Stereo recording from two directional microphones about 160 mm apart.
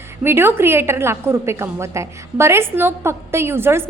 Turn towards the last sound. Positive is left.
turn(degrees=-15)  # may be behind; listen again after turning